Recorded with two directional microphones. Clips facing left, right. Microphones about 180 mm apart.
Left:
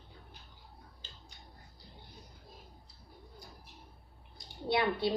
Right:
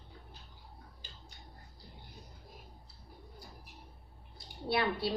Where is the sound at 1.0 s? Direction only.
15° right (ahead or behind).